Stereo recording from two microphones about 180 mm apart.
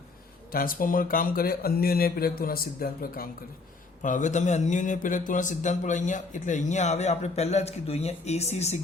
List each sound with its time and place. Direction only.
0.5 s a man's voice: 50° left (ahead or behind)
4.0 s a man's voice: 45° left (ahead or behind)